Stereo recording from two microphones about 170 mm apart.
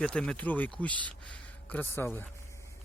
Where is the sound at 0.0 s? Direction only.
5° left (ahead or behind).